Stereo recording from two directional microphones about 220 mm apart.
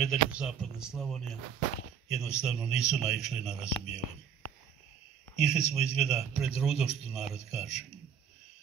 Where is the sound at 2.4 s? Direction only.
5° right (ahead or behind).